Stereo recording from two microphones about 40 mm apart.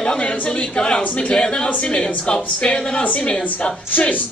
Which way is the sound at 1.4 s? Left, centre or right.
Left.